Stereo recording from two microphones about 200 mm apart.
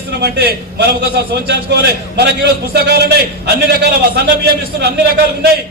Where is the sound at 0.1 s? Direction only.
55° right (ahead or behind).